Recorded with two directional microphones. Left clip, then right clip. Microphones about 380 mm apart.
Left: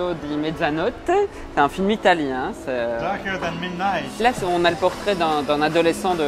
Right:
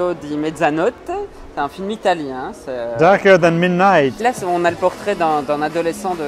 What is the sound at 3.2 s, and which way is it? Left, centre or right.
Speech, right.